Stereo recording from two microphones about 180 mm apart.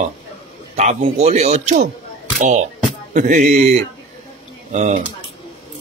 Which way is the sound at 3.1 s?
45° right (ahead or behind).